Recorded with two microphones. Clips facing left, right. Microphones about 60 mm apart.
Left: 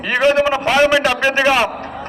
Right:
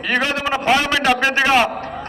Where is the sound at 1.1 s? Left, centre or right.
Centre.